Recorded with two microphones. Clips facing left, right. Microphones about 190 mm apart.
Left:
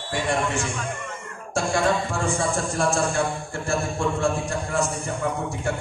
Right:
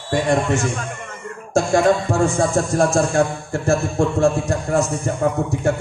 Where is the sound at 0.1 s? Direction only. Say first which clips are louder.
Right 7 dB; 40° right (ahead or behind).